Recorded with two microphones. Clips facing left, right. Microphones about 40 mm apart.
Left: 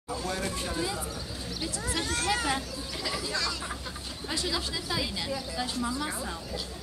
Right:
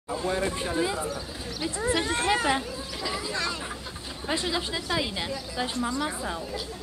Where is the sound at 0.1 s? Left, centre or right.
Right.